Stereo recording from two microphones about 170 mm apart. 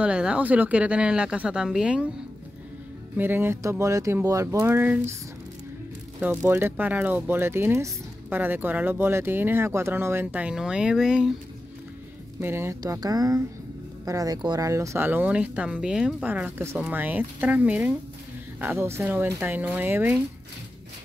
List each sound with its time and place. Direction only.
0.0 s speech: 5° right (ahead or behind)
3.2 s speech: 10° right (ahead or behind)
6.2 s speech: 15° right (ahead or behind)
12.4 s speech: 15° right (ahead or behind)